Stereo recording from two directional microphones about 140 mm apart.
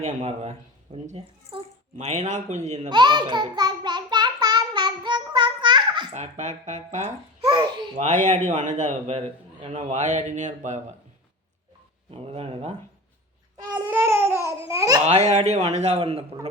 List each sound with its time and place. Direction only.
0.0 s a man's voice: 50° right (ahead or behind)
2.9 s child singing: 30° right (ahead or behind)
6.1 s a man's voice: 55° right (ahead or behind)
7.4 s babbling: 30° right (ahead or behind)
7.9 s a man's voice: 55° right (ahead or behind)
9.7 s a man's voice: 55° right (ahead or behind)
12.1 s a man's voice: 45° right (ahead or behind)
13.6 s babbling: 25° right (ahead or behind)
13.9 s babbling: 15° right (ahead or behind)
14.7 s a child's voice: 25° right (ahead or behind)
15.0 s a man's voice: 55° right (ahead or behind)